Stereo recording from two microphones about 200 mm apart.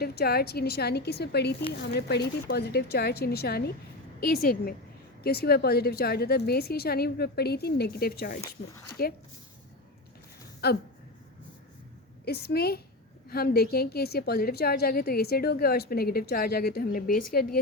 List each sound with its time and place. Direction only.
0.0 s a woman's voice: 50° left (ahead or behind)
10.6 s a woman's voice: 50° left (ahead or behind)
12.2 s a woman's voice: 55° left (ahead or behind)